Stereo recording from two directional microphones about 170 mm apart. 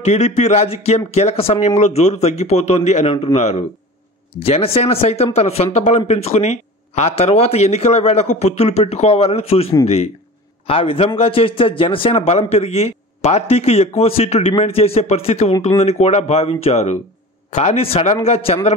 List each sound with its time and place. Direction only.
0.0 s a man's voice: 40° left (ahead or behind)